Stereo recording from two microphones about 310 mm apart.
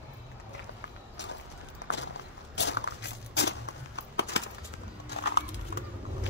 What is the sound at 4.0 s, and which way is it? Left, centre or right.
Clip-clop, left.